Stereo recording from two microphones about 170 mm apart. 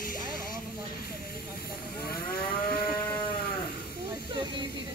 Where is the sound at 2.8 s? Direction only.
25° left (ahead or behind).